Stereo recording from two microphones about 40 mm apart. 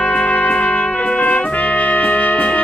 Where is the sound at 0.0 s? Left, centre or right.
Left.